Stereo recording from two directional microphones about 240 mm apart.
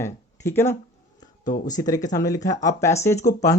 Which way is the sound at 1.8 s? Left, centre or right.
Centre.